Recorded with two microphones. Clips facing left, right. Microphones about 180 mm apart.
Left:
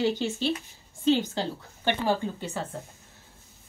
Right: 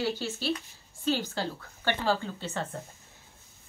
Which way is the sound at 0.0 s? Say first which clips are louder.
Left 5 dB; 20° left (ahead or behind).